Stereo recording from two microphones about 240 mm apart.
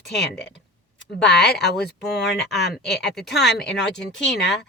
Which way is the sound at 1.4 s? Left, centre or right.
Left.